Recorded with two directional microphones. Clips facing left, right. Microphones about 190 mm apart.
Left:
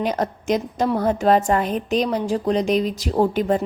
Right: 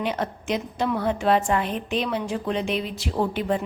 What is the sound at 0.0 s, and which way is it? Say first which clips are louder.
A woman's voice: left 4 dB; 40° left (ahead or behind).